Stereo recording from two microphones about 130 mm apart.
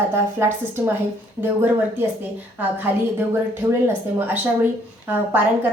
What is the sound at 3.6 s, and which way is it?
Speech, 15° right (ahead or behind).